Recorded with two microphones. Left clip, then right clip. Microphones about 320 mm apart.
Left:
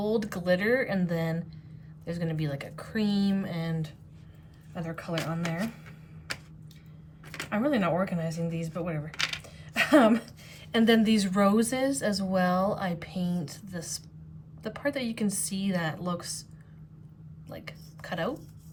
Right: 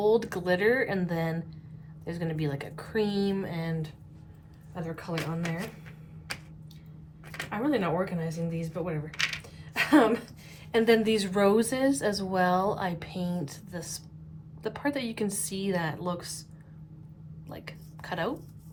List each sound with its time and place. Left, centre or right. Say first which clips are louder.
0.0 s a woman's voice: right 4 dB; centre
7.5 s a woman's voice: left 1 dB; centre
17.5 s a sound: left 1 dB; centre